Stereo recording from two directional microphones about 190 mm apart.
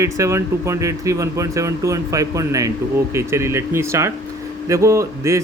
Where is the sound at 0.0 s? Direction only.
15° right (ahead or behind).